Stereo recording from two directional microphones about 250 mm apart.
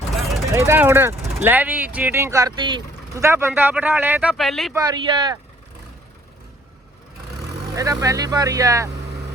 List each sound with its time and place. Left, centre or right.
0.2 s vehicle: centre
0.5 s speech: centre
4.7 s speech: centre
7.8 s speech: centre